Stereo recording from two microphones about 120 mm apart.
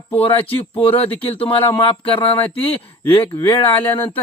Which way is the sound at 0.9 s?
55° left (ahead or behind).